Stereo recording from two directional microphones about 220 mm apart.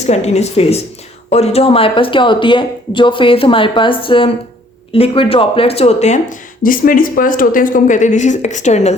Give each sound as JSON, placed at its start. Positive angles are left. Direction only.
{"t": 0.0, "sound": "speech", "side_deg": 30}